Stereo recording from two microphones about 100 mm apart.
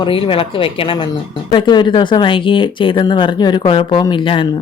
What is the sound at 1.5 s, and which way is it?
Speech, 50° left (ahead or behind).